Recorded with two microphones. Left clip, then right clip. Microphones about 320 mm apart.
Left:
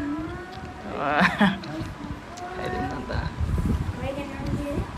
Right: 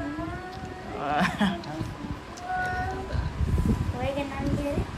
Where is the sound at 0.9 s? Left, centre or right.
Centre.